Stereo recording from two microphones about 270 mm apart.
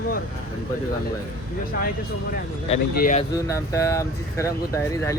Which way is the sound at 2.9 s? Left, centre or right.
Left.